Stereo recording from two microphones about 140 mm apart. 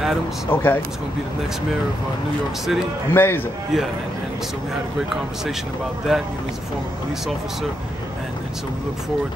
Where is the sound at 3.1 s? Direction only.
15° left (ahead or behind).